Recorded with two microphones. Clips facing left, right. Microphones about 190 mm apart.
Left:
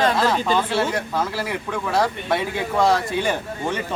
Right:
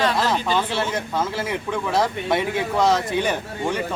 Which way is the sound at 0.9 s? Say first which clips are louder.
Even; 20° right (ahead or behind).